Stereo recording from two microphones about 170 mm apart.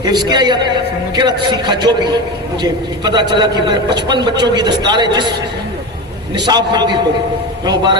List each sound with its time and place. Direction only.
0.0 s a man's voice: 25° right (ahead or behind)
6.3 s a man's voice: 25° right (ahead or behind)